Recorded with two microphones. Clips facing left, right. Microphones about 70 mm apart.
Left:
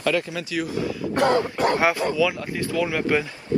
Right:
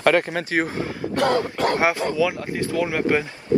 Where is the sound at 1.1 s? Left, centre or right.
Left.